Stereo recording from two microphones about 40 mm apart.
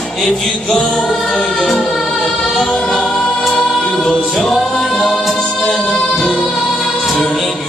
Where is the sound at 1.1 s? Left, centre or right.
Centre.